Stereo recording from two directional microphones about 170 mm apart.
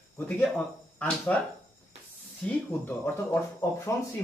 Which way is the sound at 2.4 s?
5° left (ahead or behind).